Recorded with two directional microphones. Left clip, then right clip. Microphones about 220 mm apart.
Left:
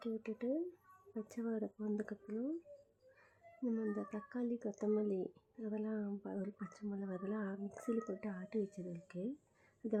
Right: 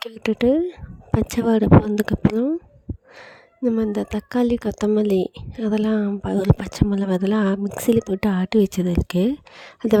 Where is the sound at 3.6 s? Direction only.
45° right (ahead or behind).